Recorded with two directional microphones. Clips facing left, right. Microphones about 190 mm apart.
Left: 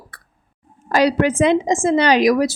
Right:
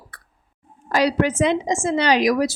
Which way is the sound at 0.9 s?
50° left (ahead or behind).